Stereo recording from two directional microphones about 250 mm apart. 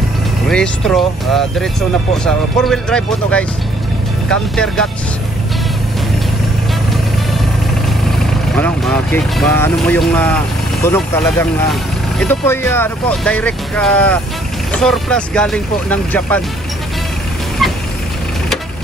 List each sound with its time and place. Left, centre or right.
0.5 s speech: centre
8.5 s speech: centre